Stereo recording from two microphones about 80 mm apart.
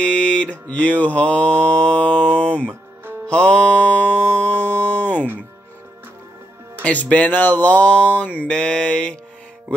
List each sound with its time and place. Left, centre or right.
0.0 s mantra: centre
6.8 s speech: centre
8.5 s mantra: centre